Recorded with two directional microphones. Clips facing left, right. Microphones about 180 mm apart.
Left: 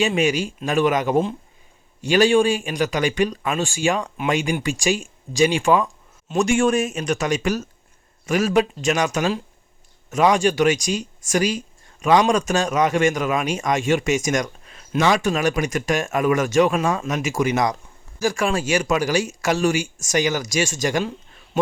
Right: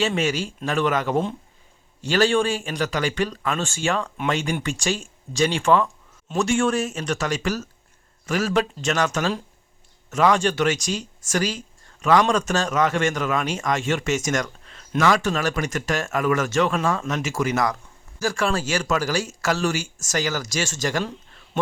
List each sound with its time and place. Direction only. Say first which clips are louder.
0.0 s speech: left 3 dB; 15° left (ahead or behind)